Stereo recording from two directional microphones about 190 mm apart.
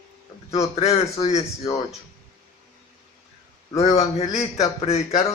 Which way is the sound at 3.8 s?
35° left (ahead or behind).